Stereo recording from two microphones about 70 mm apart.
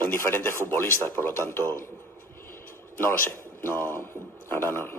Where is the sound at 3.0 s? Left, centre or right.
Left.